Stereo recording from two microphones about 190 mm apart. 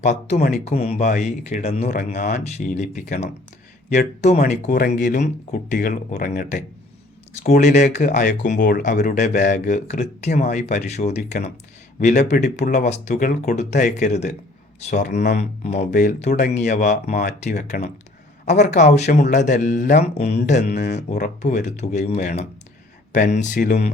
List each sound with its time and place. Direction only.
0.0 s speech: 35° left (ahead or behind)
7.6 s speech: 40° left (ahead or behind); by 12.4 s 55° left (ahead or behind)
12.4 s speech: 40° left (ahead or behind)